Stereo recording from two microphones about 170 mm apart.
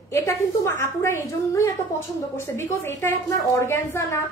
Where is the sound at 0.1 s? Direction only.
15° left (ahead or behind).